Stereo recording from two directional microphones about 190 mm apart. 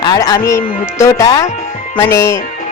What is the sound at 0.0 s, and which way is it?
Speech, 20° left (ahead or behind).